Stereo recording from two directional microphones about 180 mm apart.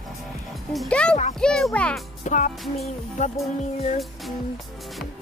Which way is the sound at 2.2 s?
45° left (ahead or behind).